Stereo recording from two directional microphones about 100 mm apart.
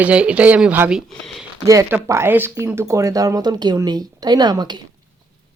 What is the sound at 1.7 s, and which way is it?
Speech, 25° right (ahead or behind).